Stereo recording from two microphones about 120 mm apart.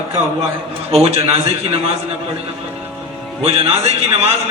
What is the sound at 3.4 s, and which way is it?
Speech, 55° right (ahead or behind).